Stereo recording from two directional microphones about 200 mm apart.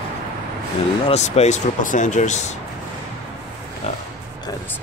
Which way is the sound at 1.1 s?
35° left (ahead or behind).